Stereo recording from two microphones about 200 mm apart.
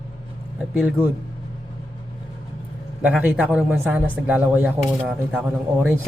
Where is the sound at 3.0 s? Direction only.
5° right (ahead or behind).